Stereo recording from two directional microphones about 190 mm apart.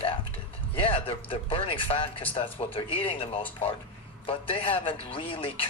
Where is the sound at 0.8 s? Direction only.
30° left (ahead or behind).